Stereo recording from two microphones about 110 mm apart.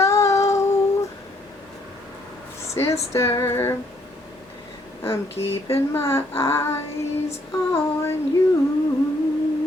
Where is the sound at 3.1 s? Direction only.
25° left (ahead or behind).